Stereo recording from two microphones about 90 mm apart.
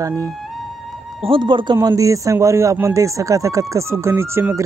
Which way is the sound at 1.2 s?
70° right (ahead or behind).